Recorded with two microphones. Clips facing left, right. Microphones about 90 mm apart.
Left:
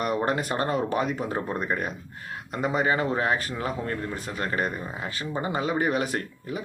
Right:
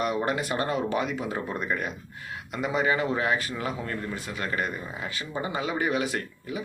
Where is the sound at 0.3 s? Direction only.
40° left (ahead or behind).